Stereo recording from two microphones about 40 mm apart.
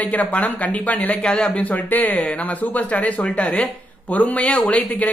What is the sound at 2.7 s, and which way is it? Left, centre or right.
Speech, left.